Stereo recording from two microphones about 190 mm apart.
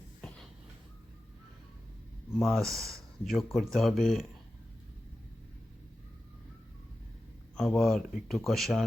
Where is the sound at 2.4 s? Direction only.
Centre (ahead or behind).